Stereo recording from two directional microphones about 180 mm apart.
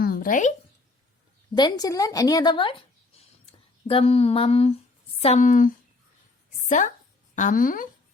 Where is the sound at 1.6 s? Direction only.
20° left (ahead or behind).